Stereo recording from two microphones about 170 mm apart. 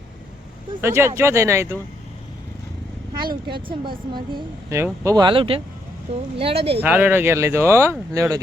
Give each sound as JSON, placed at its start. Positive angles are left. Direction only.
{"t": 0.8, "sound": "speech", "side_deg": -15}
{"t": 3.7, "sound": "speech", "side_deg": -30}
{"t": 4.7, "sound": "speech", "side_deg": -15}
{"t": 6.8, "sound": "speech", "side_deg": -10}